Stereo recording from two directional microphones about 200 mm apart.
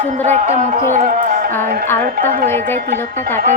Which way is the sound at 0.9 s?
40° right (ahead or behind).